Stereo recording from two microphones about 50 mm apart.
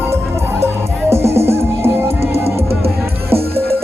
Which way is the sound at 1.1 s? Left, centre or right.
Right.